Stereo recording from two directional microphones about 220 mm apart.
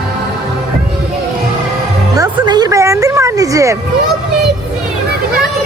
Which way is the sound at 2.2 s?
15° right (ahead or behind).